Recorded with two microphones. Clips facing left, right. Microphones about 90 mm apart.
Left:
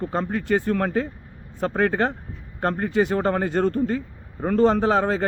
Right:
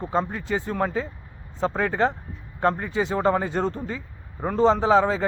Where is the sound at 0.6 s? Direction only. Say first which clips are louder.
Left 3 dB; 20° right (ahead or behind).